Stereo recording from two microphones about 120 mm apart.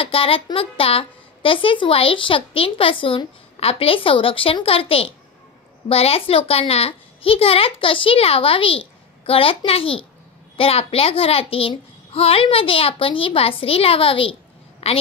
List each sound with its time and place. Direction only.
0.0 s a woman's voice: 50° left (ahead or behind)